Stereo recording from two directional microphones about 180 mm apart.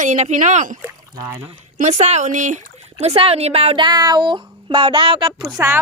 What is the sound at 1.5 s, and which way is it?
Speech, 40° right (ahead or behind).